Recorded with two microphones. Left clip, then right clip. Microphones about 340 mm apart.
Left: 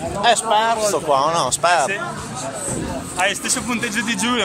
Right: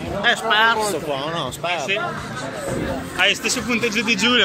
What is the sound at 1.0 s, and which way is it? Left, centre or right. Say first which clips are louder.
Speech: left 7 dB; left.